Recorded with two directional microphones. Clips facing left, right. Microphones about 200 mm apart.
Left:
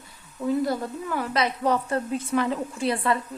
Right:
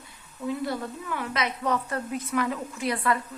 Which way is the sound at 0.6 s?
40° left (ahead or behind).